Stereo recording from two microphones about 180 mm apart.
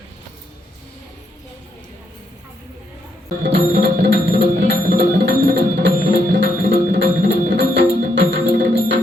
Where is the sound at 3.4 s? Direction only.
70° right (ahead or behind).